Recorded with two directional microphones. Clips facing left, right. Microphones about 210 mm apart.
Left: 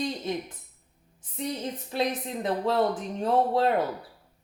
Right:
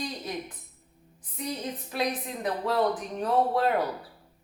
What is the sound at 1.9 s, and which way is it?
Speech, 25° left (ahead or behind).